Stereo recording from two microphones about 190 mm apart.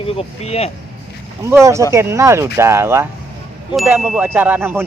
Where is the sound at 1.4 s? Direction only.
15° right (ahead or behind).